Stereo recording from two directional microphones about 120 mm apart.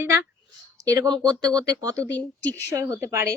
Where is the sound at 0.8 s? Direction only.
35° right (ahead or behind).